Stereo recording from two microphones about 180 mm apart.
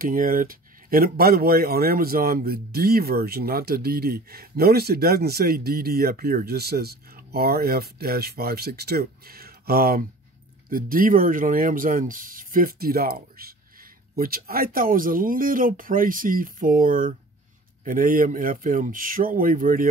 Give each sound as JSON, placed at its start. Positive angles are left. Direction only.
{"t": 0.0, "sound": "speech", "side_deg": -50}